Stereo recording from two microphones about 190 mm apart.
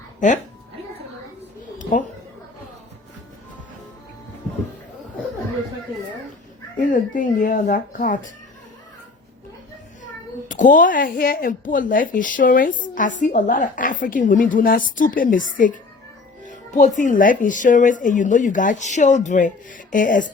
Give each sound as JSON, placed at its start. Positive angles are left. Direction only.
{"t": 1.8, "sound": "a sound", "side_deg": 40}
{"t": 6.7, "sound": "speech", "side_deg": 45}
{"t": 10.5, "sound": "speech", "side_deg": 45}